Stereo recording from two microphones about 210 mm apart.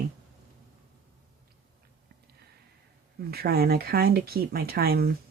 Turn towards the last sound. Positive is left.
turn(degrees=-45)  # may be behind; listen again after turning